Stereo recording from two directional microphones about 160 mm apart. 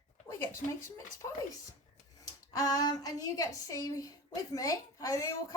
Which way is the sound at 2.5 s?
25° left (ahead or behind).